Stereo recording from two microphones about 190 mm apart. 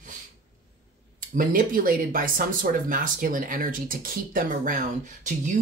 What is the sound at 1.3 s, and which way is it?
Speech, 50° right (ahead or behind).